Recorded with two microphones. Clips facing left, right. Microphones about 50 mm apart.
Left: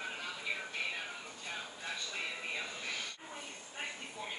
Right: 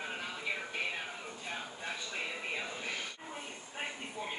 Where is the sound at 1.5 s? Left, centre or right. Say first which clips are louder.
Right 1 dB; centre.